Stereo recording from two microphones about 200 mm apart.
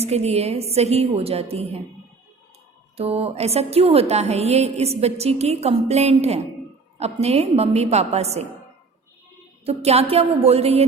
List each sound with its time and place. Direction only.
0.0 s a woman's voice: 30° right (ahead or behind)
3.0 s a woman's voice: 30° right (ahead or behind)
9.6 s a woman's voice: 30° right (ahead or behind)